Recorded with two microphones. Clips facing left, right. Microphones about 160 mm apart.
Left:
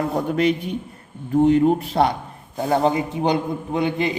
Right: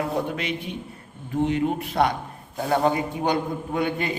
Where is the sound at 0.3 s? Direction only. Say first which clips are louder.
Left 9 dB; 40° left (ahead or behind).